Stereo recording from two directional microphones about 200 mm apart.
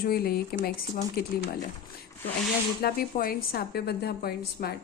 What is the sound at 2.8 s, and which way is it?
A woman's voice, 50° left (ahead or behind).